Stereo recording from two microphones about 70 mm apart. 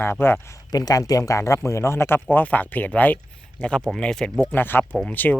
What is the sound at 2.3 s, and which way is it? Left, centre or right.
Speech, left.